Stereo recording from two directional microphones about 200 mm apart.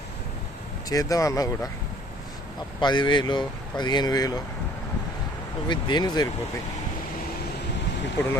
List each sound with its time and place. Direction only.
0.9 s speech: 15° left (ahead or behind)
2.8 s speech: 20° left (ahead or behind)
5.6 s speech: 20° left (ahead or behind)